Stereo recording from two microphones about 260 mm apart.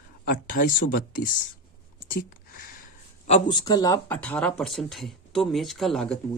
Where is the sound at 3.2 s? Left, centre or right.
Left; by 6.2 s centre.